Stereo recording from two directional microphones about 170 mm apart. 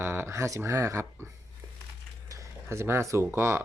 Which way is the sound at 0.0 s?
15° right (ahead or behind).